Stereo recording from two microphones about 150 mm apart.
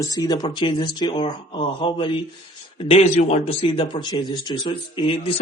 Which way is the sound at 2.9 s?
45° left (ahead or behind).